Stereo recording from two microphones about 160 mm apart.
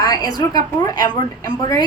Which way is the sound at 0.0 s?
25° left (ahead or behind).